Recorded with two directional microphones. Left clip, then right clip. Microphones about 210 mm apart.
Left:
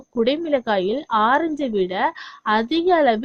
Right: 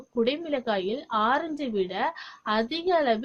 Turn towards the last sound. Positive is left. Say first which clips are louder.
# left 7 dB
turn(degrees=35)  # may be behind; listen again after turning